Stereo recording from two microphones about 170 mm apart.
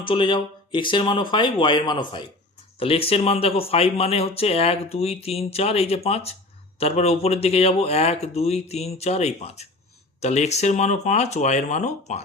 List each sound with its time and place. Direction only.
0.0 s speech: 30° left (ahead or behind)